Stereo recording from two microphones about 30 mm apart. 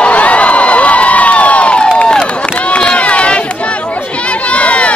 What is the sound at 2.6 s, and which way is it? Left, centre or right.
Crowd, left.